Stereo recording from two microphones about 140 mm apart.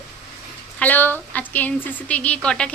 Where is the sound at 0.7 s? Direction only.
10° left (ahead or behind).